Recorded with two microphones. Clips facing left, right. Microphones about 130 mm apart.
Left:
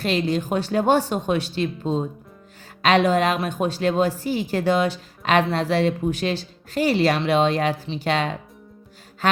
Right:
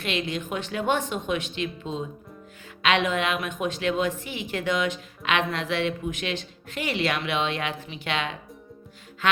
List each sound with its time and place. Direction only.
0.0 s a woman's voice: 35° left (ahead or behind)